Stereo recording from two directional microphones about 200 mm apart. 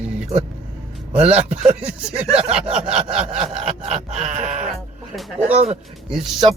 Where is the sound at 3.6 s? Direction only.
30° right (ahead or behind).